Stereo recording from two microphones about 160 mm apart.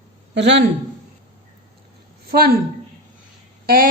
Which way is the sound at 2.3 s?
75° right (ahead or behind).